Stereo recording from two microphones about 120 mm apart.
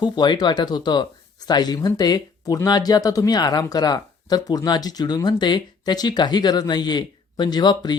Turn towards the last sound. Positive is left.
turn(degrees=35)  # may be behind; listen again after turning